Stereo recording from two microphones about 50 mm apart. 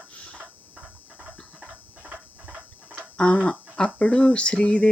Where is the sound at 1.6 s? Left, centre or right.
Centre.